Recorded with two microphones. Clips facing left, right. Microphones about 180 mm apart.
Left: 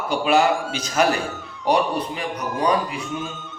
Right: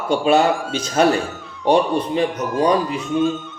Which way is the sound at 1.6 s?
25° right (ahead or behind).